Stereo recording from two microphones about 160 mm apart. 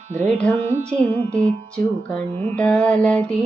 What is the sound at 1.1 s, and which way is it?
Music, 10° left (ahead or behind).